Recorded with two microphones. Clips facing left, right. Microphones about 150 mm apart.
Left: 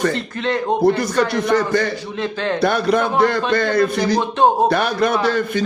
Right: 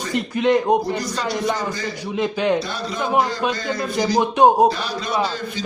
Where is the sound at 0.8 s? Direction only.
60° left (ahead or behind).